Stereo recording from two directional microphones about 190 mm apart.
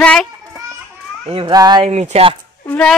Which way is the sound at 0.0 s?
5° left (ahead or behind).